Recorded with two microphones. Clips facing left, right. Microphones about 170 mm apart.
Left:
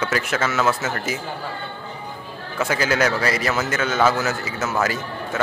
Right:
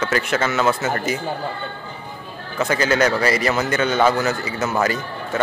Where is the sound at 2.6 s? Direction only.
5° left (ahead or behind).